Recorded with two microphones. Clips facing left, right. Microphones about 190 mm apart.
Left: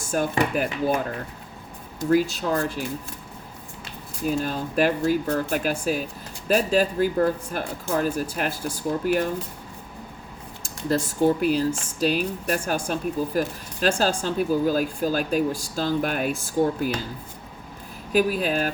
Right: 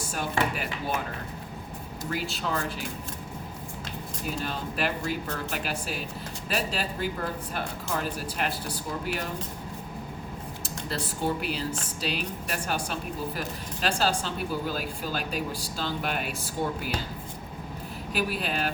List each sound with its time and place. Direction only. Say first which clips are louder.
0.1 s speech: left 7 dB; 45° left (ahead or behind)
2.0 s speech: left 11 dB; 45° left (ahead or behind)
4.4 s speech: left 6 dB; 45° left (ahead or behind)
10.6 s speech: left 10 dB; 45° left (ahead or behind)
18.1 s speech: left 8 dB; 45° left (ahead or behind)